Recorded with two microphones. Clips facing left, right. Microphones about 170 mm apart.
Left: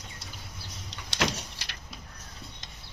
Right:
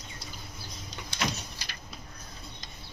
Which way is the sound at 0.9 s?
75° left (ahead or behind).